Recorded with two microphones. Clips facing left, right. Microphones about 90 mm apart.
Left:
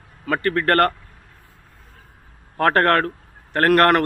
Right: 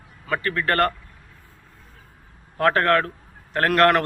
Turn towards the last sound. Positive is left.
turn(degrees=50)  # may be behind; listen again after turning